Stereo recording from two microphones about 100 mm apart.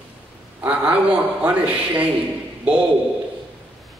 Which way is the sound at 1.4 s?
15° right (ahead or behind).